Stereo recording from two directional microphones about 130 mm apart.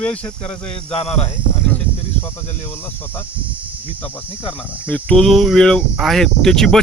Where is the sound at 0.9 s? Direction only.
50° left (ahead or behind).